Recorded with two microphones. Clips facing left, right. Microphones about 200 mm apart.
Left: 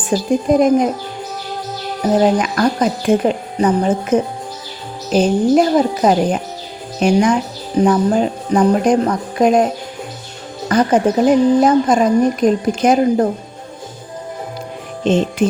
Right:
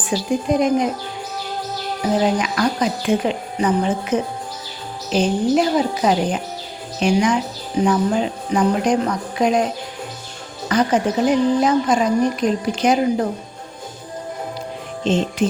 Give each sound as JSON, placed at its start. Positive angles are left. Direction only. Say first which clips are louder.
{"t": 0.1, "sound": "a woman's voice", "louder": "left 5 dB", "side_deg": 45}
{"t": 2.2, "sound": "a woman's voice", "louder": "left 4 dB", "side_deg": 45}
{"t": 10.7, "sound": "a woman's voice", "louder": "left 4 dB", "side_deg": 50}
{"t": 15.0, "sound": "speech", "louder": "left 4 dB", "side_deg": 55}